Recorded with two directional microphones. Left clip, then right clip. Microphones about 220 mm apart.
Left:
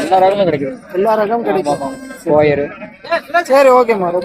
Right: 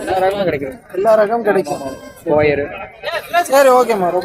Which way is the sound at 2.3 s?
25° left (ahead or behind).